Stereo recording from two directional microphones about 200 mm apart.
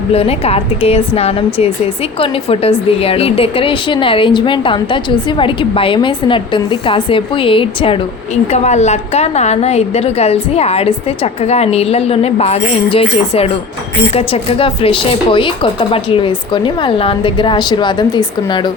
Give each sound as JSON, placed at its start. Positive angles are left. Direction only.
{"t": 0.1, "sound": "a woman's voice", "side_deg": 30}